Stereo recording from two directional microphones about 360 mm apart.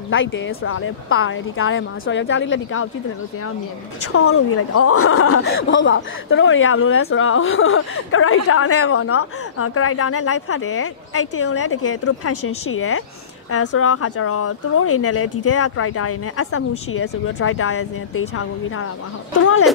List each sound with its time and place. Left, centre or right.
0.1 s a woman's voice: left
4.1 s a woman's voice: left